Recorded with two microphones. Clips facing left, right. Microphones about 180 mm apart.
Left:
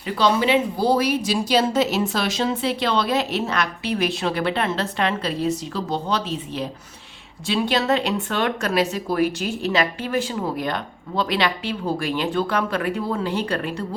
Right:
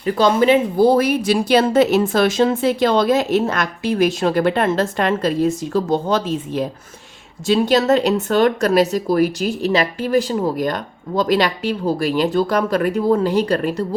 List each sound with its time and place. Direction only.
0.0 s speech: 50° right (ahead or behind)